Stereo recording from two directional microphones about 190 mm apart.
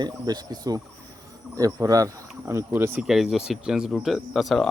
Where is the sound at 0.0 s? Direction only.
20° right (ahead or behind).